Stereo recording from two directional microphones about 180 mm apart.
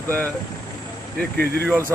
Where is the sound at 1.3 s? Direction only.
60° right (ahead or behind).